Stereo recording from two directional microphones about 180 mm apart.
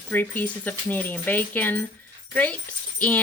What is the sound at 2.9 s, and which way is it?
Speech, 10° left (ahead or behind).